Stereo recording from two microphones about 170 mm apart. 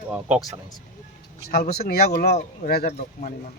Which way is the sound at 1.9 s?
65° left (ahead or behind).